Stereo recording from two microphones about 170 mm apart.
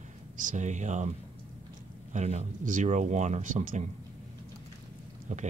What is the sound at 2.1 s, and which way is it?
Speech, 40° right (ahead or behind).